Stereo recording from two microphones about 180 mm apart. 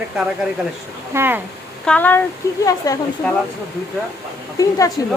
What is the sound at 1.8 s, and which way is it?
Speech, 10° left (ahead or behind).